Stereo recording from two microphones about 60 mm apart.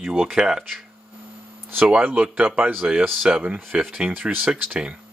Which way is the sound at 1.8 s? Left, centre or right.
Right.